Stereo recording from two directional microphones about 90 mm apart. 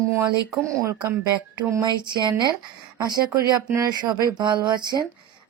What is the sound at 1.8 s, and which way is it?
Speech, 55° right (ahead or behind).